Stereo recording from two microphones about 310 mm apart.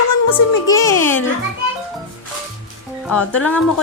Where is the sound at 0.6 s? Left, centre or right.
Centre.